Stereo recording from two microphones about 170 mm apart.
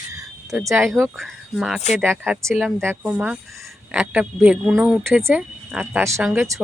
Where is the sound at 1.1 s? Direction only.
Centre (ahead or behind).